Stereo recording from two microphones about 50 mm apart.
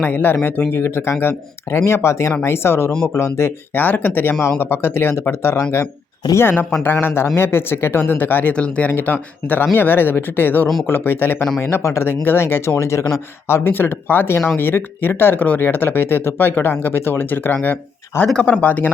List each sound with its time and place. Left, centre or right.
0.0 s speech: left
1.9 s speech: left
3.8 s speech: left
6.4 s speech: left
8.5 s speech: left
8.9 s speech: left
11.6 s speech: left
12.0 s speech: left
12.8 s speech: left
13.7 s speech: left